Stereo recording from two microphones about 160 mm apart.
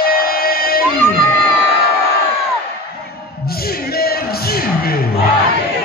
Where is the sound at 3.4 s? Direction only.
70° left (ahead or behind).